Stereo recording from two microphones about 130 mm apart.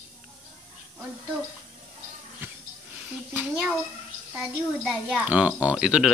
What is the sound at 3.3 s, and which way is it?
Speech, 10° right (ahead or behind).